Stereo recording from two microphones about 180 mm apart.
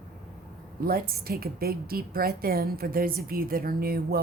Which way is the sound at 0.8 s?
55° right (ahead or behind).